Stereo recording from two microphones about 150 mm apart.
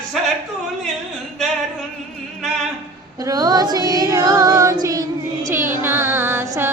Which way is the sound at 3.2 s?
25° right (ahead or behind).